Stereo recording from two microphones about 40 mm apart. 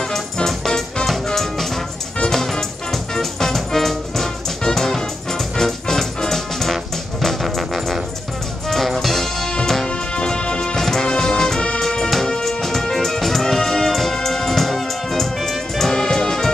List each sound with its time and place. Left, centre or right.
0.1 s music: centre
10.2 s music: left
10.8 s music: centre